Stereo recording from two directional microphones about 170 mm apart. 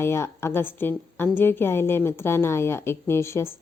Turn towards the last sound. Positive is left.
turn(degrees=15)  # may be behind; listen again after turning